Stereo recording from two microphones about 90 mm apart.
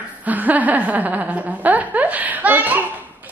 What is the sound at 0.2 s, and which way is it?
Speech, 20° right (ahead or behind).